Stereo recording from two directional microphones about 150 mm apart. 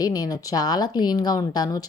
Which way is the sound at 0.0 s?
25° left (ahead or behind).